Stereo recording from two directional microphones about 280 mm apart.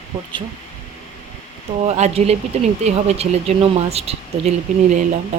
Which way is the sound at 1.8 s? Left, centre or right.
Right.